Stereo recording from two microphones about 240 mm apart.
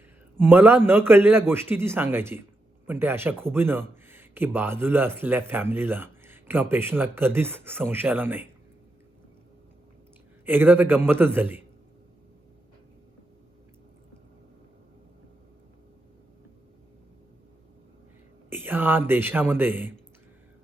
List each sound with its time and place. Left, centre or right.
0.4 s speech: centre
10.4 s speech: centre
18.5 s speech: centre